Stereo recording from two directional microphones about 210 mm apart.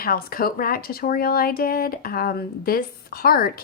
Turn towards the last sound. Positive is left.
turn(degrees=45)  # may be behind; listen again after turning